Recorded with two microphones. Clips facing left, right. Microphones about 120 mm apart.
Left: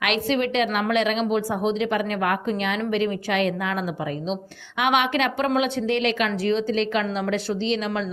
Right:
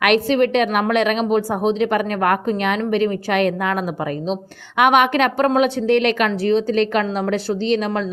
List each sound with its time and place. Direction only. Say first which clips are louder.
0.3 s a woman's voice: right 6 dB; 50° right (ahead or behind)
6.4 s a woman's voice: right 6 dB; 40° right (ahead or behind)